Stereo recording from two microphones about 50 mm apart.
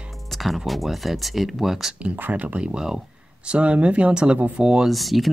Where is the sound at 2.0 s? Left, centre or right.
Right.